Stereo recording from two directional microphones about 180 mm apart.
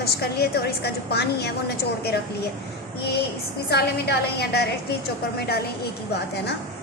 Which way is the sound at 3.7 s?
65° left (ahead or behind).